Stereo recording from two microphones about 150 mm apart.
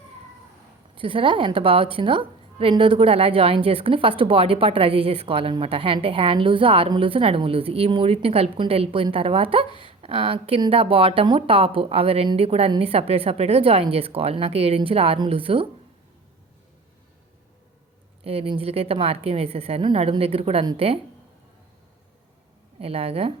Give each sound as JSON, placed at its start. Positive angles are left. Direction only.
{"t": 0.9, "sound": "a woman's voice", "side_deg": -35}
{"t": 18.2, "sound": "a woman's voice", "side_deg": -40}
{"t": 22.8, "sound": "a woman's voice", "side_deg": -40}